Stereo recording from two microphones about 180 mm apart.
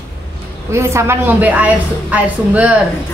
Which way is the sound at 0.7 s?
15° right (ahead or behind).